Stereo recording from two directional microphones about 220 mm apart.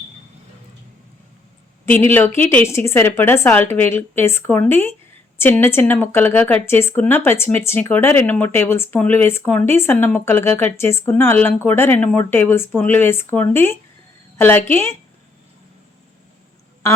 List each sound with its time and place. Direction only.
1.9 s speech: 10° left (ahead or behind)